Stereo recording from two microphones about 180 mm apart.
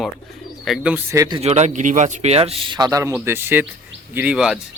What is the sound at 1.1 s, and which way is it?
Speech, 20° right (ahead or behind).